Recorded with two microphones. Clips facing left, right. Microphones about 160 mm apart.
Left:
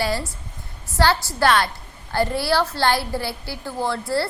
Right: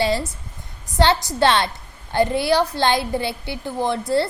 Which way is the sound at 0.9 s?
20° right (ahead or behind).